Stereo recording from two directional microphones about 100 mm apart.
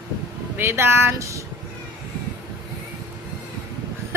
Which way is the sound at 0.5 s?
25° right (ahead or behind).